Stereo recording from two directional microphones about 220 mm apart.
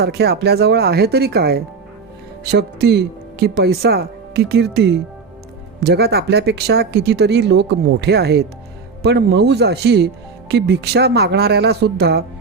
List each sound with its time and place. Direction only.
0.0 s speech: 45° right (ahead or behind)